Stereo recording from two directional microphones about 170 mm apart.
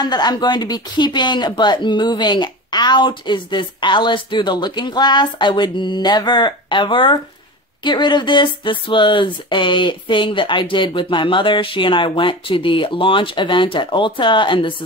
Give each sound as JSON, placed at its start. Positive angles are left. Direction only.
{"t": 0.0, "sound": "speech", "side_deg": 25}